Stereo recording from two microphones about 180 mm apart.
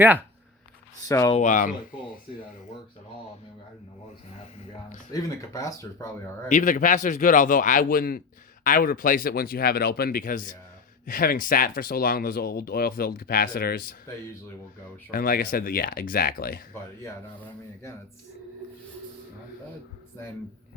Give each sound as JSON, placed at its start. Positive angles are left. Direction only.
{"t": 1.0, "sound": "speech", "side_deg": 20}
{"t": 1.4, "sound": "speech", "side_deg": 45}
{"t": 5.1, "sound": "speech", "side_deg": 20}
{"t": 6.5, "sound": "speech", "side_deg": 45}
{"t": 15.1, "sound": "speech", "side_deg": 55}